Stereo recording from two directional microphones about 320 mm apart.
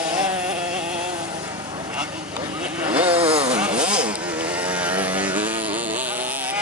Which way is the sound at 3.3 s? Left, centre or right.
Centre.